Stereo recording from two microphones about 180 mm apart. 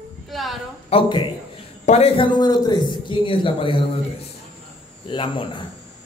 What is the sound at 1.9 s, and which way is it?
A man's voice, 35° left (ahead or behind).